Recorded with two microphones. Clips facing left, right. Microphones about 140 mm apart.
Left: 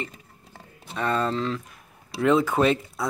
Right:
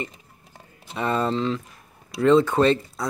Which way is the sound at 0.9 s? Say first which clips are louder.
Right 1 dB; 5° right (ahead or behind).